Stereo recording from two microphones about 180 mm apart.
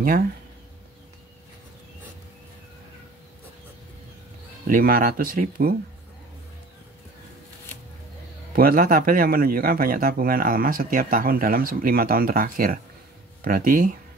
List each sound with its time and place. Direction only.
4.6 s speech: 55° right (ahead or behind)
8.5 s speech: 50° right (ahead or behind)